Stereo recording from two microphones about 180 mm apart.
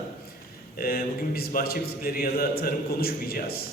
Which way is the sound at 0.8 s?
55° left (ahead or behind).